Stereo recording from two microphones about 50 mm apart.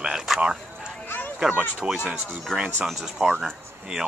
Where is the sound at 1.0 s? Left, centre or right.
Left.